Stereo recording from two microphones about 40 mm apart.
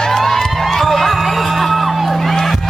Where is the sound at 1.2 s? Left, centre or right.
Centre.